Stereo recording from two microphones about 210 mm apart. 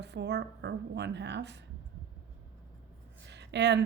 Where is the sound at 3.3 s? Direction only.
55° right (ahead or behind).